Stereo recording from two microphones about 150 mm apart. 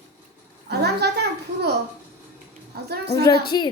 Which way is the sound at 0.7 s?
90° right.